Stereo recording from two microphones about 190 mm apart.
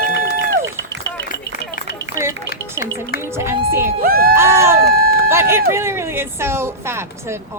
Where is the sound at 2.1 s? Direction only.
15° right (ahead or behind).